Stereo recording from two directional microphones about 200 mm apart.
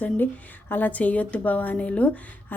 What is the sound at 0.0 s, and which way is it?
A woman's voice, 10° left (ahead or behind).